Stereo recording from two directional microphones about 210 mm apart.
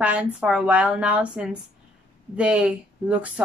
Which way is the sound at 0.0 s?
5° right (ahead or behind).